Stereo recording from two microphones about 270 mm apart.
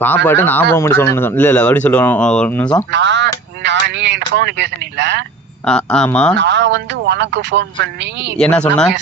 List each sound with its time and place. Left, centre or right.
0.3 s speech: centre
2.9 s speech: right
5.6 s speech: centre
6.3 s speech: right
8.4 s speech: centre